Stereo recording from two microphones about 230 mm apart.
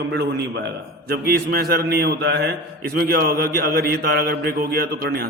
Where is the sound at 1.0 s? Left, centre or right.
Right.